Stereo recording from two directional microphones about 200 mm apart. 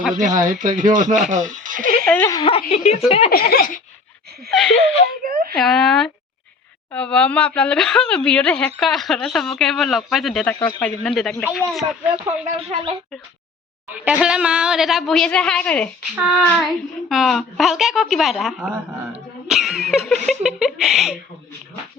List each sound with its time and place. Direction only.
0.1 s speech: 40° right (ahead or behind)
1.3 s music: 40° right (ahead or behind)
2.0 s a sound: 10° left (ahead or behind)
2.3 s a woman's voice: 30° left (ahead or behind)
3.3 s a sound: 50° left (ahead or behind)
5.2 s wail: 45° right (ahead or behind)
5.5 s a woman's voice: centre (ahead or behind)
12.5 s a woman's voice: 30° right (ahead or behind)
13.9 s a woman's voice: 5° right (ahead or behind)
17.1 s a woman's voice: centre (ahead or behind)